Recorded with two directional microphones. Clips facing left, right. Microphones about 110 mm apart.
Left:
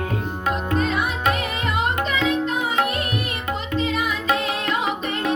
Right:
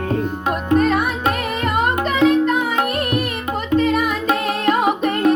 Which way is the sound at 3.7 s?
50° right (ahead or behind).